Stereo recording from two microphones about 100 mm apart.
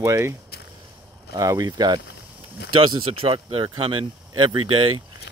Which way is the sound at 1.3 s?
40° right (ahead or behind).